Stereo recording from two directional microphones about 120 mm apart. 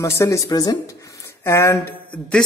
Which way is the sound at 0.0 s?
25° left (ahead or behind).